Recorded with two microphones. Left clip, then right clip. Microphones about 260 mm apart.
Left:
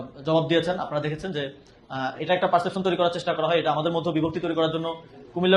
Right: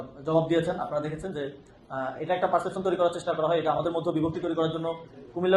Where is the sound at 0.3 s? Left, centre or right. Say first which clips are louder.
Left 2 dB; left.